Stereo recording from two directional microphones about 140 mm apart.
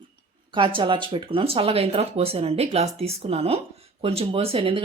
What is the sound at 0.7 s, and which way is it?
Speech, 35° right (ahead or behind).